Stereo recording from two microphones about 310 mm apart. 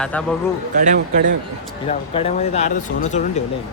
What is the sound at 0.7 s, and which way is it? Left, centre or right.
Speech, right.